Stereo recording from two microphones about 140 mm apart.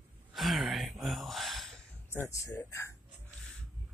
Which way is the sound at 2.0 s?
20° left (ahead or behind).